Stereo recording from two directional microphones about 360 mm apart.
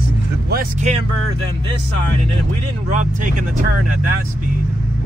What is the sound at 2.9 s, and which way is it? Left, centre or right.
Speech, right.